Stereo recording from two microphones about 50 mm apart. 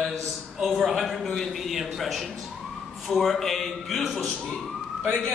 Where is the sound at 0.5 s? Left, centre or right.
Centre.